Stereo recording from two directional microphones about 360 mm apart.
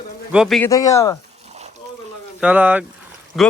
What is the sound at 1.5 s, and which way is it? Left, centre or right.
Water, centre.